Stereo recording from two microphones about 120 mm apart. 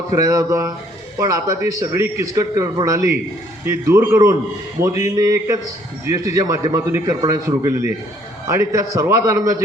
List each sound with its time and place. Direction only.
0.1 s a man's voice: 25° right (ahead or behind)